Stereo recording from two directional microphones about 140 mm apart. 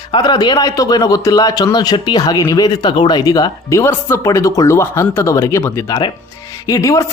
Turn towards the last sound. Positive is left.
turn(degrees=25)  # may be behind; listen again after turning